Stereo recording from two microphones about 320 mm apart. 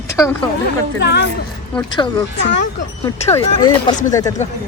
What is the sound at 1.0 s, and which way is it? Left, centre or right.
Speech, left.